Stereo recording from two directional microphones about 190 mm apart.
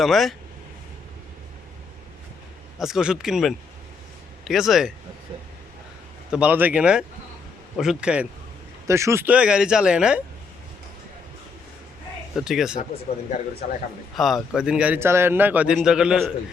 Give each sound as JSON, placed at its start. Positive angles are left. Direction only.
{"t": 0.0, "sound": "a man's voice", "side_deg": 0}
{"t": 2.7, "sound": "a man's voice", "side_deg": 0}
{"t": 6.3, "sound": "a man's voice", "side_deg": -10}
{"t": 12.3, "sound": "a man's voice", "side_deg": 0}
{"t": 13.6, "sound": "a man's voice", "side_deg": 40}
{"t": 14.2, "sound": "a man's voice", "side_deg": 0}